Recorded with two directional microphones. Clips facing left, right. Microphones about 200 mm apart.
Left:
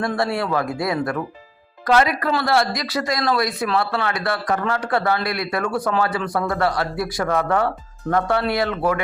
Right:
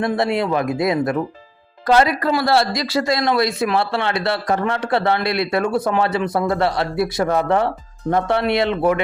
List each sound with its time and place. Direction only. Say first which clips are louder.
0.2 s speech: right 3 dB; 20° right (ahead or behind)
1.9 s a woman's voice: right 2 dB; 30° right (ahead or behind)